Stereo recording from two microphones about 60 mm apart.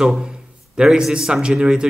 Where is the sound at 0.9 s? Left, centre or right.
Centre.